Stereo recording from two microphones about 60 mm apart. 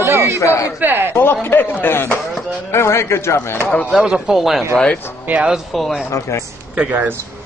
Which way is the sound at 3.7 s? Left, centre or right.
Left.